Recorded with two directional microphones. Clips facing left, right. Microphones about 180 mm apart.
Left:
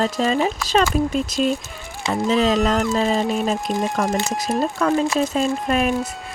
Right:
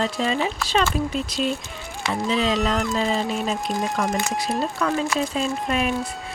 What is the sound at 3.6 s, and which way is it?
Speech, centre (ahead or behind).